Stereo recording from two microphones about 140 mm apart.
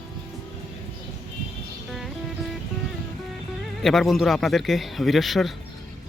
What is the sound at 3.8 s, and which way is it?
Speech, centre (ahead or behind).